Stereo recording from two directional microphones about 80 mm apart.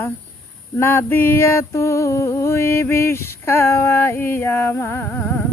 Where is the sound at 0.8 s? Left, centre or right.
Left.